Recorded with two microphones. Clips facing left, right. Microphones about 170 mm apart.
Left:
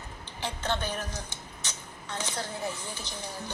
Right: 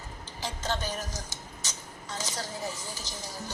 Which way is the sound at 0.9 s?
40° right (ahead or behind).